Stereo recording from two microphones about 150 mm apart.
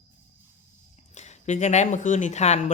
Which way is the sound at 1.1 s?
50° left (ahead or behind).